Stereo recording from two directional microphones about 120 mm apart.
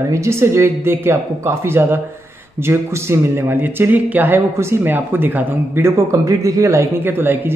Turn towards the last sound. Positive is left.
turn(degrees=-20)  # may be behind; listen again after turning